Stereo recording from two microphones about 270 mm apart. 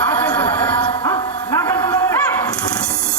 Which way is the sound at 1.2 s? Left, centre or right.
Centre.